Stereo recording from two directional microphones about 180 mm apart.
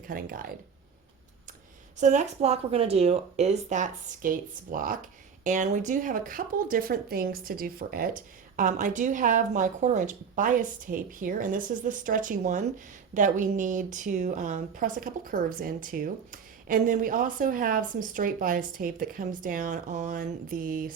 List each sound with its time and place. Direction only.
0.1 s a woman's voice: 50° right (ahead or behind)
2.0 s a woman's voice: 40° right (ahead or behind)